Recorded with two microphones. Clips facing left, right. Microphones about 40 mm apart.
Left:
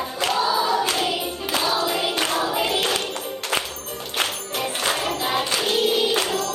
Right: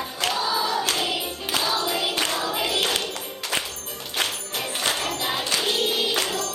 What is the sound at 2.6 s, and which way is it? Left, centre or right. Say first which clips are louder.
Music: left 2 dB; left.